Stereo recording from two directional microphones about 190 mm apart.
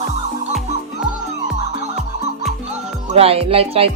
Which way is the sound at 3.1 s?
30° right (ahead or behind).